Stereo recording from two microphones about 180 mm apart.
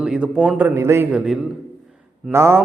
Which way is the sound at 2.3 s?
15° right (ahead or behind).